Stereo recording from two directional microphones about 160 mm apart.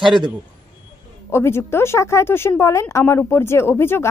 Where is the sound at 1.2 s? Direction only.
15° left (ahead or behind).